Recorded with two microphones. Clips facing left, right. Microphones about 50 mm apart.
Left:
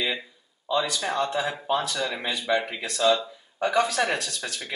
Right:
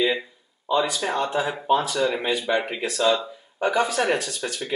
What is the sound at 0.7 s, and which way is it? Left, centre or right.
Speech, centre.